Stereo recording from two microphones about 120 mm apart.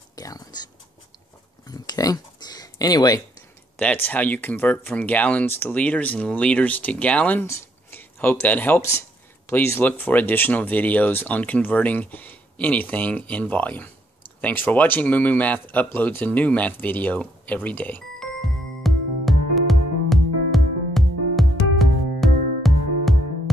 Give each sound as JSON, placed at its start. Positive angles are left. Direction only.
{"t": 0.1, "sound": "whispering", "side_deg": 30}
{"t": 1.7, "sound": "a sound", "side_deg": 30}
{"t": 3.7, "sound": "speech", "side_deg": 15}
{"t": 18.2, "sound": "music", "side_deg": 0}